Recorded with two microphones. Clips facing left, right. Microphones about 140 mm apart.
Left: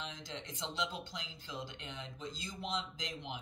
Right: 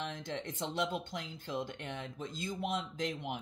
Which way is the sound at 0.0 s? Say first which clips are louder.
Right 6 dB; 55° right (ahead or behind).